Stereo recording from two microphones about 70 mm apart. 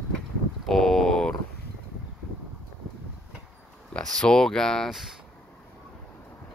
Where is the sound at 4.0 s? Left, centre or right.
Centre.